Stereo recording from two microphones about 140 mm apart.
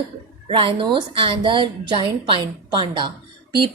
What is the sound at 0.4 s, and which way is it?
A woman's voice, 40° right (ahead or behind).